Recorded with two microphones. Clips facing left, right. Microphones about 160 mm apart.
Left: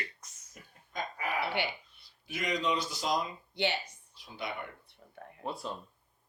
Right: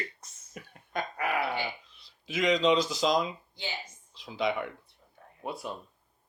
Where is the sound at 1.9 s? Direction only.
90° right.